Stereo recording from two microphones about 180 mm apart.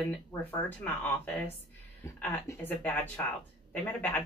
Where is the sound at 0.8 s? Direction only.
10° left (ahead or behind).